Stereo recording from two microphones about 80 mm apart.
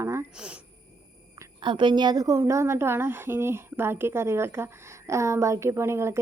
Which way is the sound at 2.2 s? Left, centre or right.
Right.